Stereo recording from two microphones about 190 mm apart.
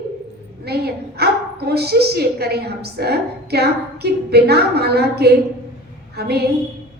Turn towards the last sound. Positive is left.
turn(degrees=-55)  # may be behind; listen again after turning